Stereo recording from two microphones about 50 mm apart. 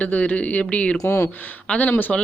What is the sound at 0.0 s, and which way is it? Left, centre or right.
Speech, left.